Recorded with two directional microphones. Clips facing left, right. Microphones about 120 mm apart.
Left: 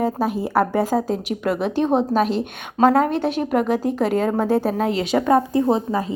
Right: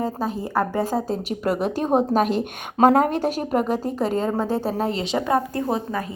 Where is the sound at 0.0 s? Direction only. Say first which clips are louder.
Left 4 dB; 15° left (ahead or behind).